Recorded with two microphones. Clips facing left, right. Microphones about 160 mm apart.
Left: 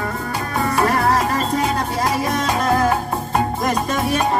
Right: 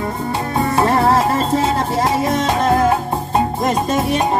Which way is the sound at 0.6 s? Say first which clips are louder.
Right 3 dB; 25° right (ahead or behind).